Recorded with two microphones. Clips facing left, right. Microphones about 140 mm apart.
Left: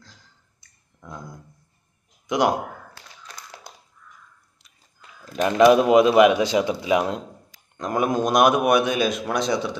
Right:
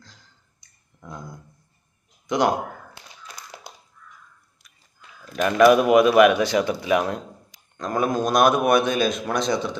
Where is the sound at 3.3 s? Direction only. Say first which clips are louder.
Even; 10° right (ahead or behind).